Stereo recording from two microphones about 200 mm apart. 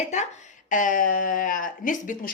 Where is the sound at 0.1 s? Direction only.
35° left (ahead or behind).